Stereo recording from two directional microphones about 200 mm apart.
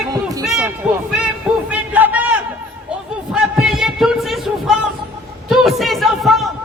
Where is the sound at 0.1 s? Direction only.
20° right (ahead or behind).